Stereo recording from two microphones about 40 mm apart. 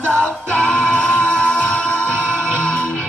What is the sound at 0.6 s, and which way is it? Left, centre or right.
Music, centre.